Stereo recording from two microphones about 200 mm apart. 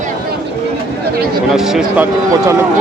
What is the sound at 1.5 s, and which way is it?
Speech, centre (ahead or behind).